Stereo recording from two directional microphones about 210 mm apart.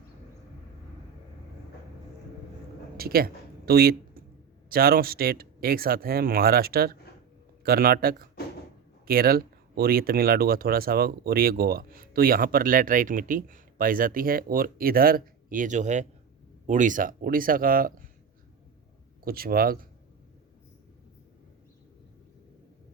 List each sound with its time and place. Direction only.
3.0 s speech: 45° right (ahead or behind)
19.2 s speech: 45° right (ahead or behind)